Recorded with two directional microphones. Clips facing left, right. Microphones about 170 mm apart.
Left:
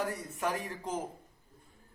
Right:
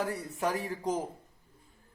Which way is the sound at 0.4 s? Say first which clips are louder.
Right 2 dB; 35° right (ahead or behind).